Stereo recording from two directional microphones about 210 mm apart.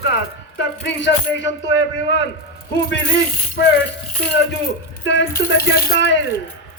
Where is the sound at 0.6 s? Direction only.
55° left (ahead or behind).